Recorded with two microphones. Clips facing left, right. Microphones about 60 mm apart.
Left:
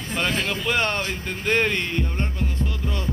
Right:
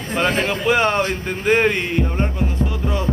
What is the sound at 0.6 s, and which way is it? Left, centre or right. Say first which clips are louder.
Speech: right 8 dB; centre.